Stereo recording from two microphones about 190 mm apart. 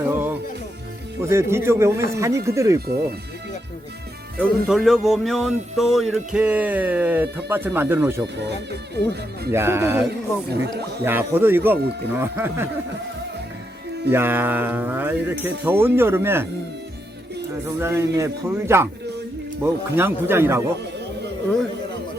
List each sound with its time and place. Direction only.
0.0 s music: 10° right (ahead or behind)
1.2 s speech: 15° right (ahead or behind)
4.4 s speech: 5° right (ahead or behind)
9.5 s speech: 15° right (ahead or behind)
14.1 s speech: 10° right (ahead or behind)
17.7 s speech: 15° right (ahead or behind)